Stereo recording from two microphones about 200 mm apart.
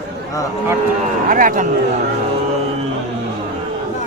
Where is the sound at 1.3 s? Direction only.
45° right (ahead or behind).